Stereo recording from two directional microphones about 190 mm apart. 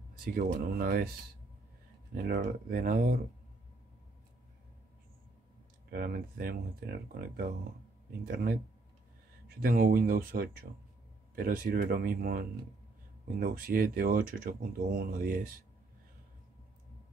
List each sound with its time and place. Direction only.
0.2 s speech: 50° right (ahead or behind)
2.1 s speech: 50° right (ahead or behind)
5.9 s speech: 50° right (ahead or behind)
9.5 s speech: 50° right (ahead or behind)